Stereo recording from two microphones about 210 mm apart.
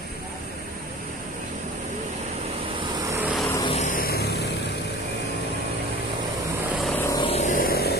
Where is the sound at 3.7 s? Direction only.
40° left (ahead or behind).